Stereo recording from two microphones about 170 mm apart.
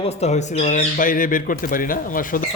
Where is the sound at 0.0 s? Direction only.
40° left (ahead or behind).